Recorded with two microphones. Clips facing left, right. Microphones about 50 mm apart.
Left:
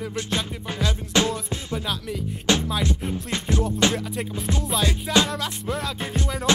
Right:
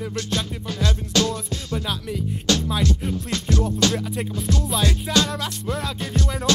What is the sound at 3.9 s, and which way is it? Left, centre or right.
Music, centre.